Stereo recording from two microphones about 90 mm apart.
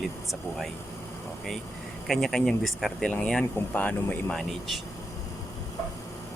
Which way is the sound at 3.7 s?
15° left (ahead or behind).